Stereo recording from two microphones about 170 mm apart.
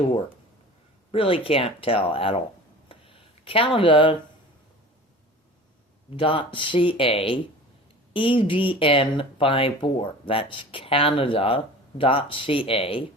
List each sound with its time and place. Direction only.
1.1 s speech: 35° left (ahead or behind)
2.9 s a sound: 30° left (ahead or behind)
6.1 s speech: 30° left (ahead or behind)